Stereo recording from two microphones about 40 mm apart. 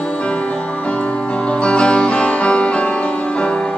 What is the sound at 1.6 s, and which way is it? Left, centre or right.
Music, left.